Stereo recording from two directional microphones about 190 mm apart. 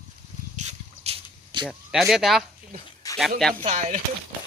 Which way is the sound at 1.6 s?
5° right (ahead or behind).